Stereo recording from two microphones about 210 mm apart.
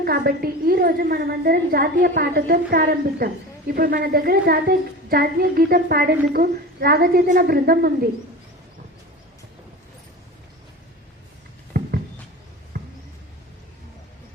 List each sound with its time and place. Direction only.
0.0 s a woman's voice: 45° right (ahead or behind)
11.7 s a sound: 45° right (ahead or behind)
12.7 s basketball bounce: 40° right (ahead or behind)